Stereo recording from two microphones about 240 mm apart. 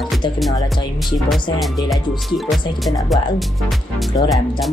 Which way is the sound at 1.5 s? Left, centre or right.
Centre.